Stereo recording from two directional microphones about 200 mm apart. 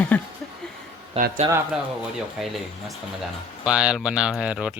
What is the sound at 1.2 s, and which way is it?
Speech, 30° right (ahead or behind).